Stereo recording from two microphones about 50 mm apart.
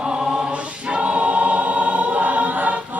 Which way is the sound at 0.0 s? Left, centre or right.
Centre.